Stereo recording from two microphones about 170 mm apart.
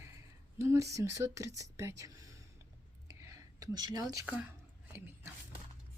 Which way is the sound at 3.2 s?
20° right (ahead or behind).